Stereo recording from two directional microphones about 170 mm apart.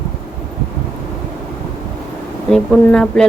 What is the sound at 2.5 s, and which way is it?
Speech, 5° left (ahead or behind).